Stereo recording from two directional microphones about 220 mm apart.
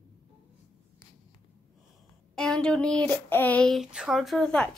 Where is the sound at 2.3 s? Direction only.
5° left (ahead or behind).